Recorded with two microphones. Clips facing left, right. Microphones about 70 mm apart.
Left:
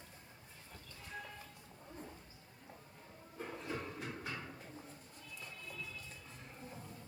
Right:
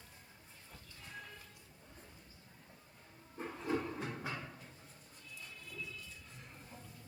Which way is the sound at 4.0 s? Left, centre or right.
Right.